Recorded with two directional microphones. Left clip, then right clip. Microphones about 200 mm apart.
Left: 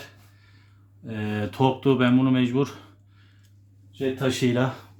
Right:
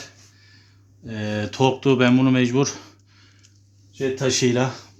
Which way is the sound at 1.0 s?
10° right (ahead or behind).